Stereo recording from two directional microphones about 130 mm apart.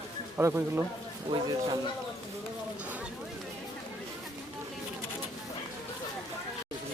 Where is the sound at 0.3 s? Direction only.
20° right (ahead or behind).